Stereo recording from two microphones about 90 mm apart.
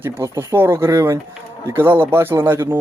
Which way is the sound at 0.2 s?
30° right (ahead or behind).